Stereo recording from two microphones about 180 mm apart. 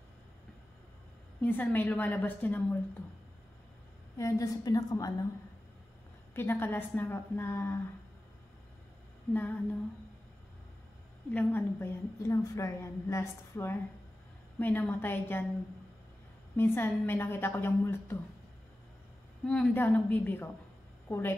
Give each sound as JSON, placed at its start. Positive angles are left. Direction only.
{"t": 1.4, "sound": "a woman's voice", "side_deg": 10}
{"t": 4.2, "sound": "a woman's voice", "side_deg": 20}
{"t": 6.3, "sound": "a woman's voice", "side_deg": 10}
{"t": 9.3, "sound": "a woman's voice", "side_deg": 10}
{"t": 11.2, "sound": "a woman's voice", "side_deg": 10}
{"t": 16.5, "sound": "a woman's voice", "side_deg": 10}
{"t": 19.4, "sound": "a woman's voice", "side_deg": 5}